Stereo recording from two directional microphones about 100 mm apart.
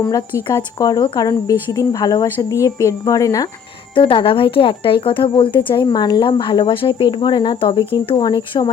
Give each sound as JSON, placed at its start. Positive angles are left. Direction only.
{"t": 0.1, "sound": "speech", "side_deg": 35}
{"t": 3.9, "sound": "a woman's voice", "side_deg": 60}